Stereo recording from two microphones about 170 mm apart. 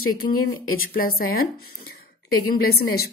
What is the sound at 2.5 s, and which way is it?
Speech, 65° left (ahead or behind).